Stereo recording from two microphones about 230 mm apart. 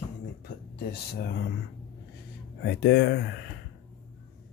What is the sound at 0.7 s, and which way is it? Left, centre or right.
Speech, left.